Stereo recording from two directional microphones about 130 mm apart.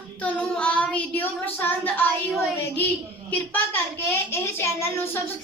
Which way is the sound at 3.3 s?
15° left (ahead or behind).